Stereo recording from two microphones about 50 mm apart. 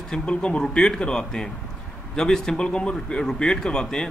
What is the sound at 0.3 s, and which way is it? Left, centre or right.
Speech, centre.